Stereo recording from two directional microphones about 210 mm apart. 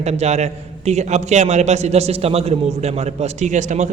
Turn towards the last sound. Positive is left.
turn(degrees=-35)  # may be behind; listen again after turning